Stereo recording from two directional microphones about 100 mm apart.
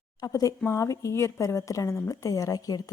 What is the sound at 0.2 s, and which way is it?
A woman's voice, 35° left (ahead or behind).